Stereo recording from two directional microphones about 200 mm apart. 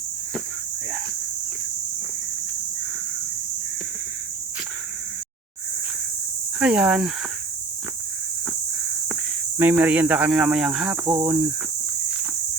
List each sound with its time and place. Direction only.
6.6 s speech: 5° right (ahead or behind)
9.6 s speech: 10° right (ahead or behind)